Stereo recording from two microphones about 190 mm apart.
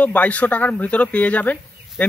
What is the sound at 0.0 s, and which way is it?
A man's voice, 10° left (ahead or behind).